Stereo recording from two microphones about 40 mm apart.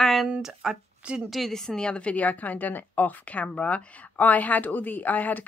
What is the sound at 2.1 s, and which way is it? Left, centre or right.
Speech, left.